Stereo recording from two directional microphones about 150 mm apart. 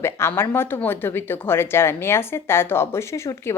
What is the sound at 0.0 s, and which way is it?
Speech, 15° left (ahead or behind).